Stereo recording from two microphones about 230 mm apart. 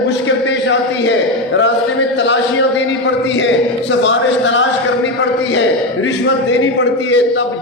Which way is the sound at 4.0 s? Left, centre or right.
Left.